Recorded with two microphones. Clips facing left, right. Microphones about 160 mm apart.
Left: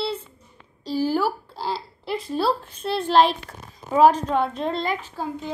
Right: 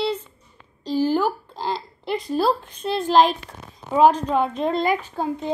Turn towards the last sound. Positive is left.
turn(degrees=-15)  # may be behind; listen again after turning